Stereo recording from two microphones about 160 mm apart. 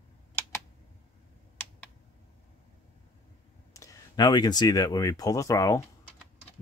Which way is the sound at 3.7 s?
20° left (ahead or behind).